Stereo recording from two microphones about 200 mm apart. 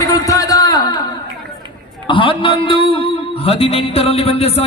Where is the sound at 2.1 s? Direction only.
25° left (ahead or behind).